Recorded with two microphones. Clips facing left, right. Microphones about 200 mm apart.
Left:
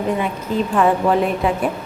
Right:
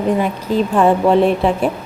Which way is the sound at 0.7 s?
30° right (ahead or behind).